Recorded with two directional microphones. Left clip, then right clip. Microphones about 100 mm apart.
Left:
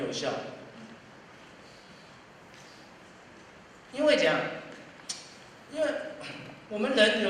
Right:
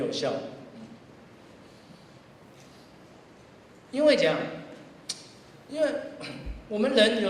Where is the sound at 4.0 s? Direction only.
35° left (ahead or behind).